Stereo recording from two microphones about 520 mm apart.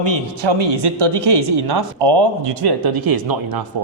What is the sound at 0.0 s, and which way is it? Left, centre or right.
Speech, right.